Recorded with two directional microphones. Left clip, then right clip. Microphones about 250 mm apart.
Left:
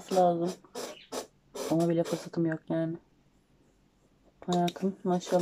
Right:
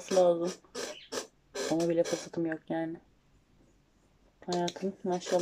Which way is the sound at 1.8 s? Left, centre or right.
Centre.